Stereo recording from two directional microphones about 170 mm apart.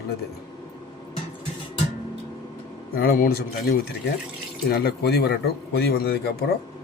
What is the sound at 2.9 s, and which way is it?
Speech, 60° left (ahead or behind).